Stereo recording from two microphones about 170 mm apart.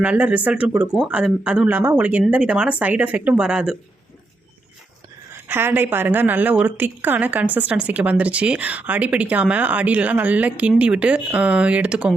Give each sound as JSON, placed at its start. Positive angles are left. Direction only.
{"t": 0.0, "sound": "a woman's voice", "side_deg": -10}
{"t": 5.3, "sound": "a woman's voice", "side_deg": -15}